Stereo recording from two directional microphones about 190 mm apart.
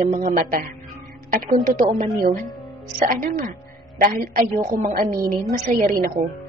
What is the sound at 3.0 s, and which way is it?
A woman's voice, 50° right (ahead or behind).